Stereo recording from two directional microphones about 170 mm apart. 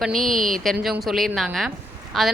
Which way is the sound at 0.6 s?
Centre (ahead or behind).